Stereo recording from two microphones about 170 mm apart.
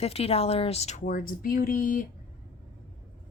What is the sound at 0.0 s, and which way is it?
Speech, 35° left (ahead or behind).